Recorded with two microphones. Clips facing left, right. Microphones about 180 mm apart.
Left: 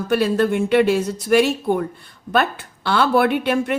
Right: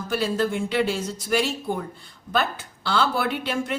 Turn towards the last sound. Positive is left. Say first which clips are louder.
# left 7 dB
turn(degrees=60)  # may be behind; listen again after turning